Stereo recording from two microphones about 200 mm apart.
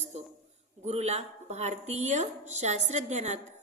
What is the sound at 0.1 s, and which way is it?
A woman's voice, 30° right (ahead or behind).